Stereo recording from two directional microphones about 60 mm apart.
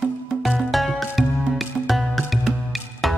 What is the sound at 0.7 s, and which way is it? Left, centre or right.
Music, centre.